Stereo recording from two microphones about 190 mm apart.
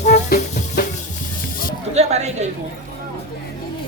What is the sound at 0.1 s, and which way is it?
Music, 50° left (ahead or behind).